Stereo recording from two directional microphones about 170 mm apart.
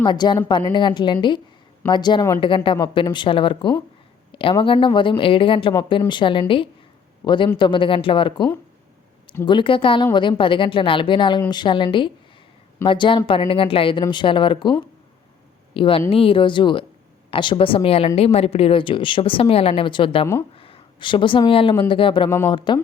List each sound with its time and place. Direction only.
0.0 s a woman's voice: 25° left (ahead or behind)
9.5 s a woman's voice: 30° left (ahead or behind)